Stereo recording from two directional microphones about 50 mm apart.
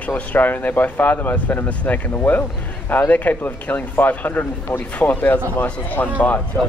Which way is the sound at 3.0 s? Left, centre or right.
Left.